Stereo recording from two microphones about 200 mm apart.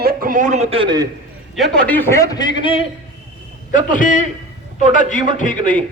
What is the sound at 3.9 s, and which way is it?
A man's voice, 40° left (ahead or behind).